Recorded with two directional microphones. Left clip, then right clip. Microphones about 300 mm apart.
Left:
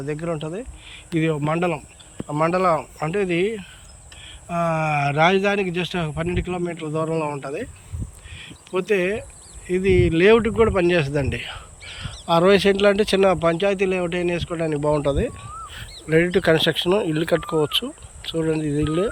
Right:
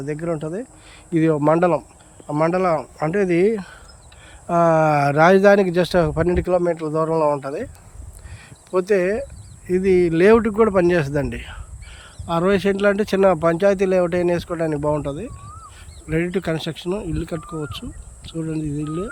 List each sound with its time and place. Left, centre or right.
0.0 s speech: centre